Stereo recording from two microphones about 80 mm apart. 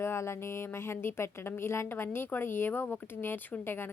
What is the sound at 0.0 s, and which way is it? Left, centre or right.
A woman's voice, left.